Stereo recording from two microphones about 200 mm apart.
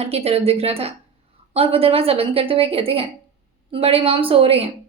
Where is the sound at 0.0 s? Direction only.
30° right (ahead or behind).